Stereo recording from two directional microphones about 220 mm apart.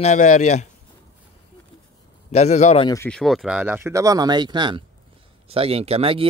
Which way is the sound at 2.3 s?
30° left (ahead or behind).